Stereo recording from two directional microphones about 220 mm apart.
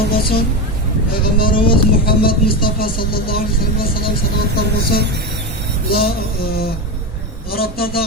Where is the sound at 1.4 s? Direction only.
40° left (ahead or behind).